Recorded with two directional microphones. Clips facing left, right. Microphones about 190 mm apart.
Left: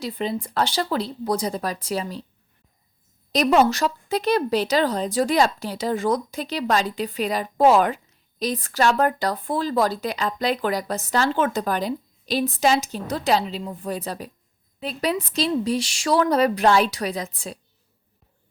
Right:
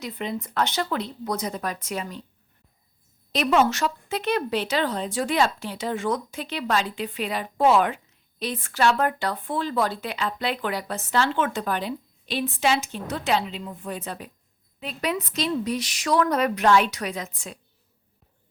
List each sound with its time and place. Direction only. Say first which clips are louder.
0.0 s speech: left 4 dB; 30° left (ahead or behind)
3.3 s speech: left 3 dB; 40° left (ahead or behind)